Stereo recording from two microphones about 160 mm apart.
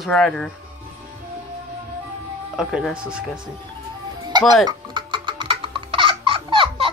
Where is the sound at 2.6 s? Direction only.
5° right (ahead or behind).